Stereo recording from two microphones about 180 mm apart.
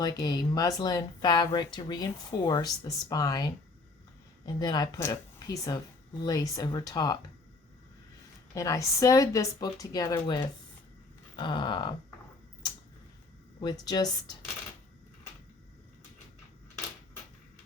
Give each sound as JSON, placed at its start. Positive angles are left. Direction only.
{"t": 0.0, "sound": "speech", "side_deg": 20}
{"t": 8.5, "sound": "speech", "side_deg": 20}
{"t": 13.6, "sound": "speech", "side_deg": 20}